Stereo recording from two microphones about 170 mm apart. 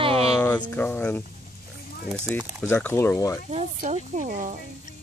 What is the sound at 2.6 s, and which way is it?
Speech, 10° left (ahead or behind).